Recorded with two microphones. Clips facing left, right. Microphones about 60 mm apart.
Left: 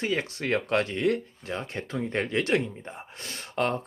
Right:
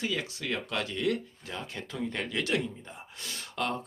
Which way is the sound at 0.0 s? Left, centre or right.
Left.